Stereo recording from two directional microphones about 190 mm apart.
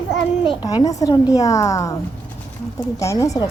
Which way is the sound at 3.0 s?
15° left (ahead or behind).